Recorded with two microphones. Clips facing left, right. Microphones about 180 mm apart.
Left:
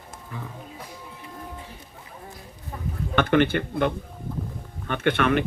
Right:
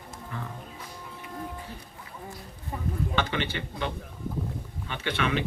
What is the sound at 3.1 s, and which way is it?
Speech, 55° left (ahead or behind).